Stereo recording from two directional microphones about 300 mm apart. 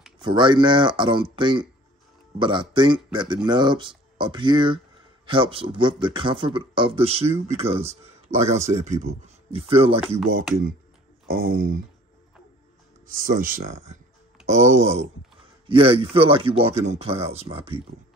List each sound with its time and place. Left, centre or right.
0.2 s a man's voice: centre
13.0 s speech: right